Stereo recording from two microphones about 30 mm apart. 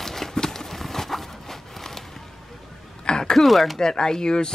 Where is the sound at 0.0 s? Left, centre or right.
Centre.